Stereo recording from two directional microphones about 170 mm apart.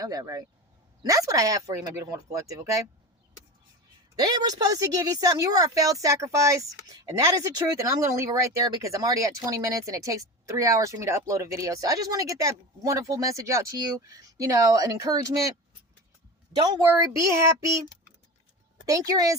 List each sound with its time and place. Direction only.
0.0 s speech: 20° right (ahead or behind)
4.1 s a woman's voice: 20° right (ahead or behind)
16.9 s child singing: 15° right (ahead or behind)
18.9 s speech: 20° right (ahead or behind)